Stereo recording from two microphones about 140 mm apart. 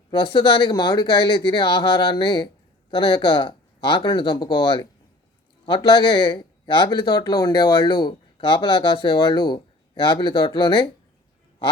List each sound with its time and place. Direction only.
0.1 s speech: 35° left (ahead or behind)